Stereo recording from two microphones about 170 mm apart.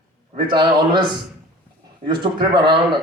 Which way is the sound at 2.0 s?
25° right (ahead or behind).